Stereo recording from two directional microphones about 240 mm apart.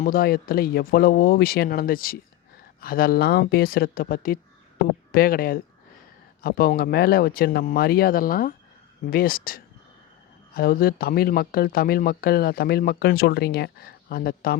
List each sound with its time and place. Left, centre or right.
0.0 s speech: left